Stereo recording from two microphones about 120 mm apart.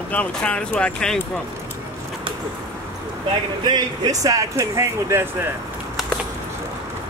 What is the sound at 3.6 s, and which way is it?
Speech, 35° right (ahead or behind).